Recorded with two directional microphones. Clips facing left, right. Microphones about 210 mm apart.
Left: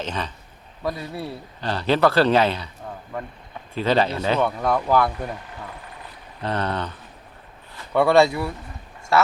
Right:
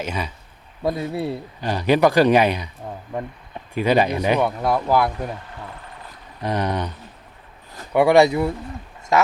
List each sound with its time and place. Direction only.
0.0 s speech: 10° right (ahead or behind)
0.8 s speech: 25° right (ahead or behind)
1.6 s speech: 15° right (ahead or behind)
6.4 s speech: 15° right (ahead or behind)
7.9 s speech: 15° right (ahead or behind)